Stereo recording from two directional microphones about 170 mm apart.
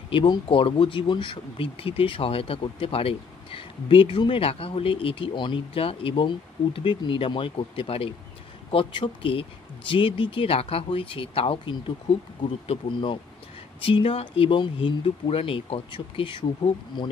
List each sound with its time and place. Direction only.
0.1 s speech: 30° left (ahead or behind)